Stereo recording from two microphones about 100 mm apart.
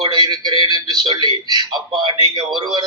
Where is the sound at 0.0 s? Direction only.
45° right (ahead or behind).